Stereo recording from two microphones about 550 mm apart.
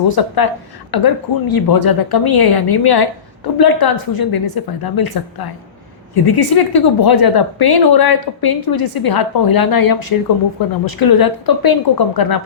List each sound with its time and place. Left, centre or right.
0.1 s a woman's voice: left